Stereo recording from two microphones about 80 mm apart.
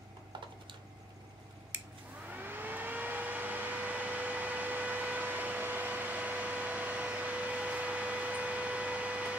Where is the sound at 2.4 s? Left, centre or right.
Right.